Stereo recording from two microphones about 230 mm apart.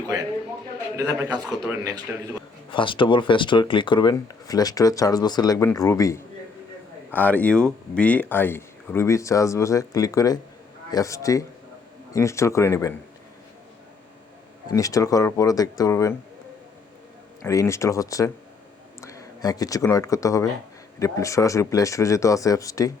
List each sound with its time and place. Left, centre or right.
0.9 s a man's voice: centre
2.6 s speech: left
14.7 s speech: centre
17.4 s speech: centre